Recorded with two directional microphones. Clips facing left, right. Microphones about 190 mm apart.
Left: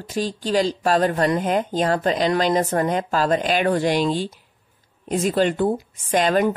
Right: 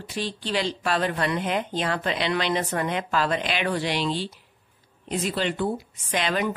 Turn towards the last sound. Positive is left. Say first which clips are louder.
# left 7 dB
turn(degrees=45)  # may be behind; listen again after turning